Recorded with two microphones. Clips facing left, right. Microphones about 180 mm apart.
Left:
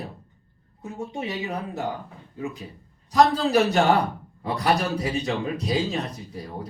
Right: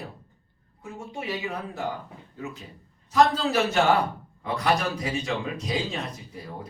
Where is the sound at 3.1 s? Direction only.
35° left (ahead or behind).